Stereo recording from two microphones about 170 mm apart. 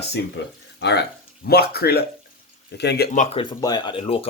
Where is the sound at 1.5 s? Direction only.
65° left (ahead or behind).